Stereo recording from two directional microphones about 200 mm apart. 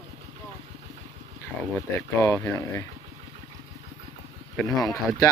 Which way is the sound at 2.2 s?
10° left (ahead or behind).